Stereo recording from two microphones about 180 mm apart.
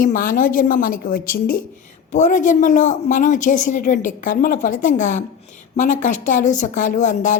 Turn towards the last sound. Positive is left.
turn(degrees=40)  # may be behind; listen again after turning